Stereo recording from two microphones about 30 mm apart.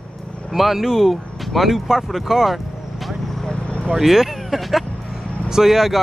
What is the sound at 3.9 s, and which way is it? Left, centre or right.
Speech, centre.